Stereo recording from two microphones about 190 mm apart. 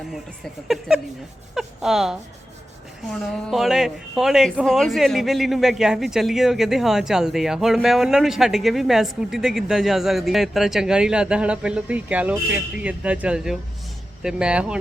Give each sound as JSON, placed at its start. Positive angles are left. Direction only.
{"t": 0.7, "sound": "speech", "side_deg": 0}